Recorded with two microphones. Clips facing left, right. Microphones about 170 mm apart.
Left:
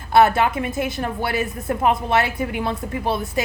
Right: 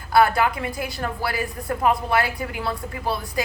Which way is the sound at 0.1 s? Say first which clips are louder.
Left 3 dB; 25° left (ahead or behind).